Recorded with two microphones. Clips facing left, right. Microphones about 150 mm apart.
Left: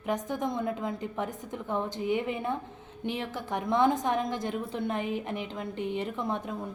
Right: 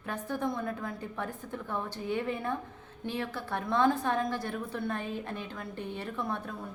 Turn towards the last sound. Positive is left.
turn(degrees=20)  # may be behind; listen again after turning